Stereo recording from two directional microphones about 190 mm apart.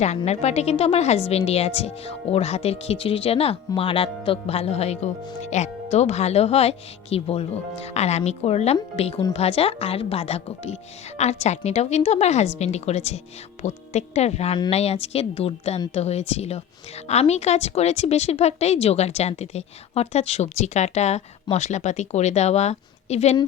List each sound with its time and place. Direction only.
0.2 s speech: 35° left (ahead or behind)